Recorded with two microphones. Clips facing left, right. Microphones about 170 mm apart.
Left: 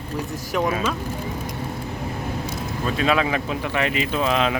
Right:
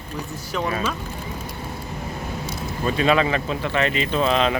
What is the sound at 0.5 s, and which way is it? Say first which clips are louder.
Speech: left 2 dB; 10° left (ahead or behind).